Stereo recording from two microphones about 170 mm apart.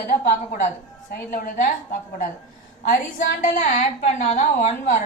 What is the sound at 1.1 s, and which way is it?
A woman's voice, 60° left (ahead or behind).